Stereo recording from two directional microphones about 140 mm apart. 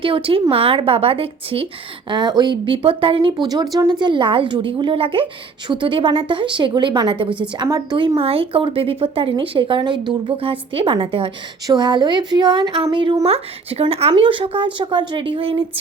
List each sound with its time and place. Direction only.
0.0 s speech: 40° right (ahead or behind)
2.0 s speech: 30° right (ahead or behind)